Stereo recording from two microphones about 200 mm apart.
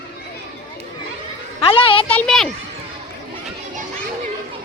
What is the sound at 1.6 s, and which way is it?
Speech, 30° left (ahead or behind).